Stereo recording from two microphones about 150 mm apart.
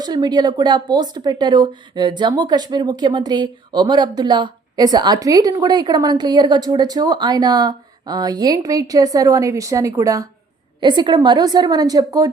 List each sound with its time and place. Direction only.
0.0 s speech: 25° right (ahead or behind)